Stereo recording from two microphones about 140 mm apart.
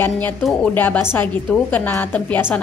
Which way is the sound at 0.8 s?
15° left (ahead or behind).